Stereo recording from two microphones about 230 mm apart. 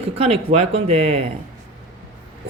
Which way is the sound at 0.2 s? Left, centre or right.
Right.